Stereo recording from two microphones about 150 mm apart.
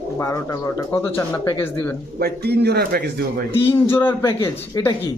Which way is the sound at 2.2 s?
90° right.